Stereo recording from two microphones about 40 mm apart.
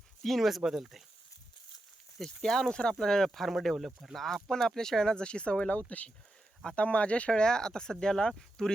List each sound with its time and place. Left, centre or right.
0.2 s speech: centre
2.2 s speech: centre; by 5.7 s left
5.7 s speech: left; by 8.7 s centre